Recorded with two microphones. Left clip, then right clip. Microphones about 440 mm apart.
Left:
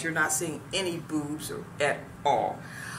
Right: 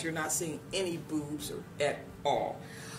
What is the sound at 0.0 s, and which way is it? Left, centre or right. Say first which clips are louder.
Speech: left 7 dB; right.